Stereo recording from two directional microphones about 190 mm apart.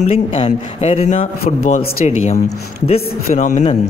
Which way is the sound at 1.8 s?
35° left (ahead or behind).